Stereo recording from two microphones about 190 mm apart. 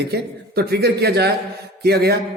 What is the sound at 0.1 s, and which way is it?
A man's voice, 55° right (ahead or behind).